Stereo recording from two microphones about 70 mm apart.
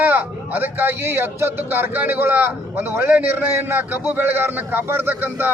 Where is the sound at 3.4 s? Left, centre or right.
Right.